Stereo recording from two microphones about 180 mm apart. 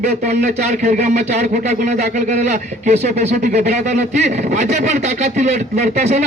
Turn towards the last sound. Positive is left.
turn(degrees=-40)  # may be behind; listen again after turning